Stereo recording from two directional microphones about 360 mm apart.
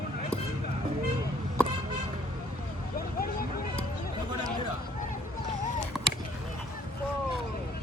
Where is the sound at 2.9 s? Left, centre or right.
Left.